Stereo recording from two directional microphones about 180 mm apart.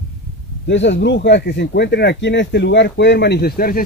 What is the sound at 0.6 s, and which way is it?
Speech, 85° left.